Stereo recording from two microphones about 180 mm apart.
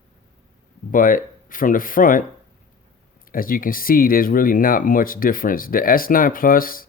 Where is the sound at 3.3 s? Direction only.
50° left (ahead or behind).